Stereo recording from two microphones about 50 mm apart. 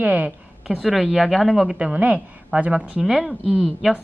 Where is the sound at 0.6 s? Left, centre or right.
Centre.